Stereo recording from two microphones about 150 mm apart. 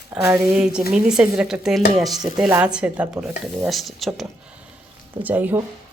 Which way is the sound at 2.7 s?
10° right (ahead or behind).